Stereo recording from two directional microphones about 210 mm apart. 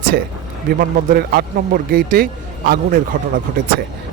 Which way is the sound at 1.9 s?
45° right (ahead or behind).